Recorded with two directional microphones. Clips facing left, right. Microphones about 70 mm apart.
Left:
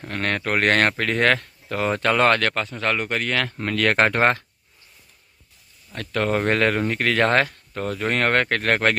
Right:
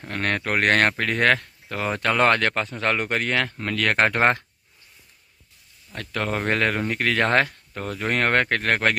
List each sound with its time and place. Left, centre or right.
0.0 s speech: centre
2.2 s speech: centre
2.7 s speech: right
3.6 s speech: centre
5.9 s speech: centre